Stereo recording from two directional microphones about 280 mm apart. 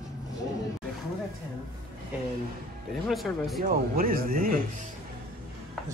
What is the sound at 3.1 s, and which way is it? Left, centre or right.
Speech, centre.